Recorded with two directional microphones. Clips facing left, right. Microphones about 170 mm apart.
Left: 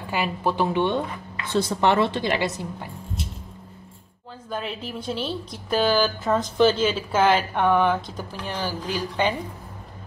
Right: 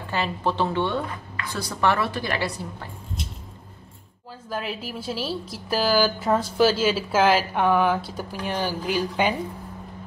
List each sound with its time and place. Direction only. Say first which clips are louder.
0.1 s speech: left 1 dB; 10° left (ahead or behind)
4.5 s speech: even; 5° right (ahead or behind)